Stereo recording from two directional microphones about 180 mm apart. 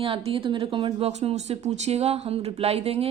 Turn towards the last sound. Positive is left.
turn(degrees=-35)  # may be behind; listen again after turning